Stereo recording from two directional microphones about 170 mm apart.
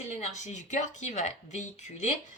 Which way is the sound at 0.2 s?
45° left (ahead or behind).